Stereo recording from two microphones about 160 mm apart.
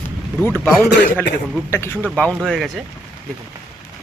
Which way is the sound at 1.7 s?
15° left (ahead or behind).